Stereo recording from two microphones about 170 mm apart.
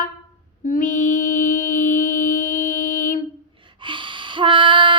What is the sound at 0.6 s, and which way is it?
Child singing, 50° left (ahead or behind).